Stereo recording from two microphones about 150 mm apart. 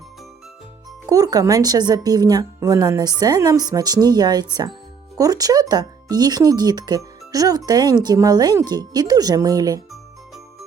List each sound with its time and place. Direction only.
1.1 s speech: 25° right (ahead or behind)
9.9 s music: centre (ahead or behind)